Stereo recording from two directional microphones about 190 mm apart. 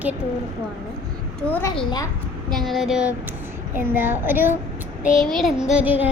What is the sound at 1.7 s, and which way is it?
Speech, 25° left (ahead or behind).